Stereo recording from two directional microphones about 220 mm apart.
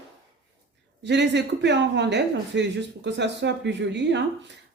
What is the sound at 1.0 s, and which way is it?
A woman's voice, 50° right (ahead or behind).